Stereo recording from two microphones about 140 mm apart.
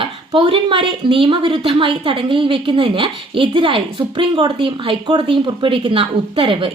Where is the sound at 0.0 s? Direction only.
40° right (ahead or behind).